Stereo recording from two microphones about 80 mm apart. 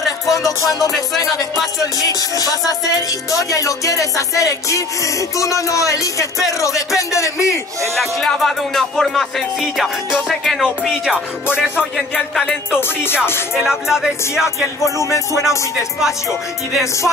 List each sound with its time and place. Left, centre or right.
0.0 s music: centre
0.7 s music: left
1.3 s music: centre
2.0 s music: left
7.0 s a man's voice: left
8.0 s music: centre
13.6 s speech: centre
15.0 s a man's voice: left